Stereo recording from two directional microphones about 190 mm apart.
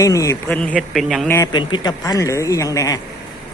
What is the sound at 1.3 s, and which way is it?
A man's voice, 15° left (ahead or behind).